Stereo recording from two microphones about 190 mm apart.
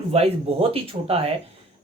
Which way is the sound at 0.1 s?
30° right (ahead or behind).